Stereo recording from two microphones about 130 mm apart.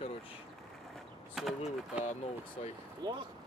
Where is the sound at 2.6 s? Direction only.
60° left (ahead or behind).